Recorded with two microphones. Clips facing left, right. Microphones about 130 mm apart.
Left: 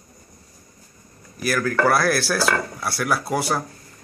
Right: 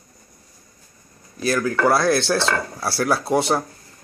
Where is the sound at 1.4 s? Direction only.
25° right (ahead or behind).